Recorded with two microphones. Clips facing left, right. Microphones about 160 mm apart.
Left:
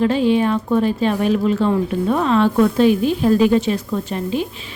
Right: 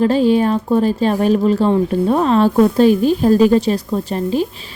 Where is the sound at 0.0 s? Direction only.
40° right (ahead or behind).